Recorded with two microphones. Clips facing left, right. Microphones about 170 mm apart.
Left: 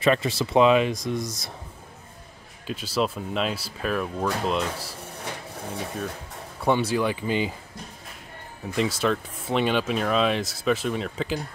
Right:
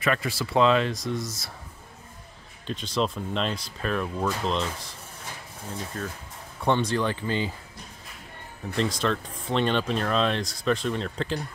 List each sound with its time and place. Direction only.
0.0 s speech: 25° left (ahead or behind)
2.6 s speech: 5° left (ahead or behind)
6.0 s speech: 15° left (ahead or behind)
8.7 s speech: 5° left (ahead or behind)